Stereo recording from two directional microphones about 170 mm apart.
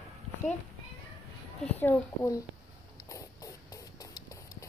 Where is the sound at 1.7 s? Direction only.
15° left (ahead or behind).